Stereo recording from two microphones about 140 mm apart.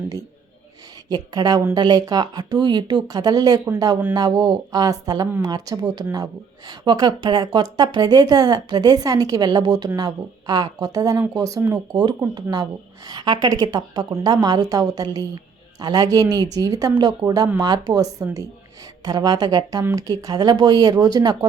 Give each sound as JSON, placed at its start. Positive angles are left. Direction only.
{"t": 1.1, "sound": "a woman's voice", "side_deg": -30}